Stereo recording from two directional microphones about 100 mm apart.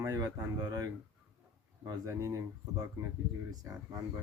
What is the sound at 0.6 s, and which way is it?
Speech, 40° right (ahead or behind).